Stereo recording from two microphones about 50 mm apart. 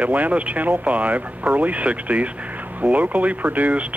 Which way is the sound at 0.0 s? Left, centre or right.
Right.